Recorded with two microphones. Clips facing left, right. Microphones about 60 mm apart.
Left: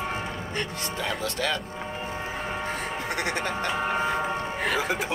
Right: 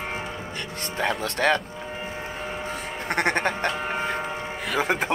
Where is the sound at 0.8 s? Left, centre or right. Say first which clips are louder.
Right 3 dB; right.